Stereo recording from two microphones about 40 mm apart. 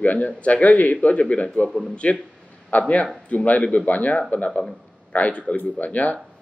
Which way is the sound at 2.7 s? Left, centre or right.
Left.